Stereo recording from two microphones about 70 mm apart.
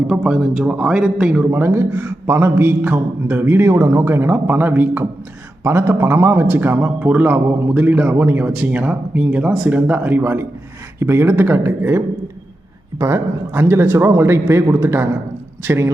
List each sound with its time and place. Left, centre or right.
0.1 s a man's voice: centre
1.5 s a man's voice: right
5.6 s a man's voice: right
7.0 s a man's voice: right